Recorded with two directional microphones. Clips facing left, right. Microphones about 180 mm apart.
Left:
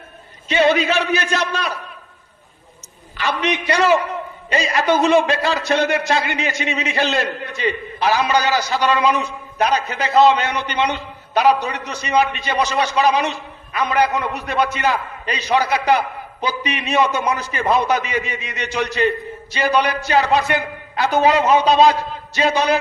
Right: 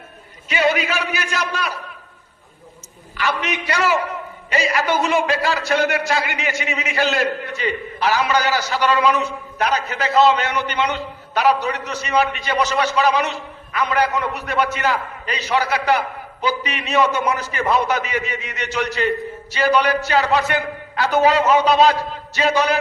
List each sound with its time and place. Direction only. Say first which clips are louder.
0.4 s a man's voice: left 4 dB; 25° left (ahead or behind)
3.2 s a man's voice: left 2 dB; 20° left (ahead or behind)